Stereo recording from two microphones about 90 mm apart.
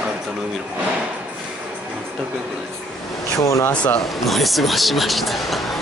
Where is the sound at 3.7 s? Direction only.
15° left (ahead or behind).